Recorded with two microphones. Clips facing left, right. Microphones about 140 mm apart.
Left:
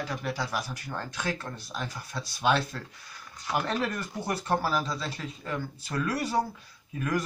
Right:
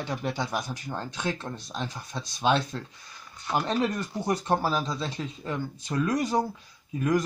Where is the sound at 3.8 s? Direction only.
20° right (ahead or behind).